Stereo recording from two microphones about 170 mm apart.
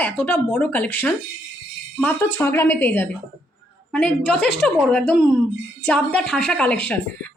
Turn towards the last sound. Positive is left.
turn(degrees=10)  # may be behind; listen again after turning